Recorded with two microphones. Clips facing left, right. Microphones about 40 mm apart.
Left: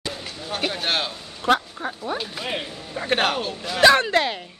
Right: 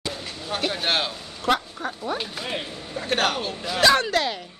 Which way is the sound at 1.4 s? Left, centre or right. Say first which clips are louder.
Left 3 dB; centre.